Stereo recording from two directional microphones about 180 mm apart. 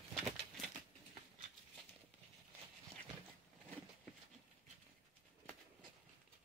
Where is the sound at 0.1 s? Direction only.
Centre (ahead or behind).